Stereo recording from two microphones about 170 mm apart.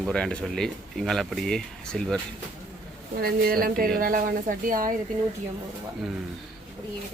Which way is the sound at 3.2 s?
60° right (ahead or behind).